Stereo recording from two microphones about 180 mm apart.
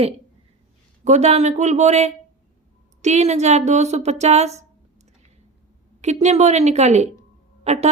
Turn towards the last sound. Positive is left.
turn(degrees=-35)  # may be behind; listen again after turning